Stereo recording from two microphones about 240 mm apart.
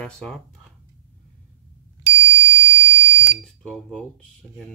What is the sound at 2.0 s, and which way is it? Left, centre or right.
Bicycle bell, centre.